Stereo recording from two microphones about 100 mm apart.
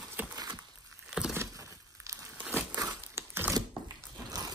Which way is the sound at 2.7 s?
35° right (ahead or behind).